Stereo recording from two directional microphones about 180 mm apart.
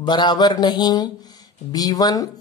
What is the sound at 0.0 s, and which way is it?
Speech, 25° left (ahead or behind).